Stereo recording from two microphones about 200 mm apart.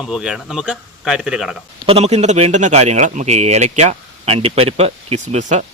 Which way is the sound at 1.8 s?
30° right (ahead or behind).